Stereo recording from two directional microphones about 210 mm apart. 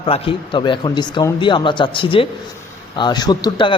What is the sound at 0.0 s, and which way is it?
A man's voice, 25° left (ahead or behind).